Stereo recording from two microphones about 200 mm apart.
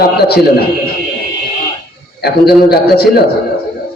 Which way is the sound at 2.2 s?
50° left (ahead or behind).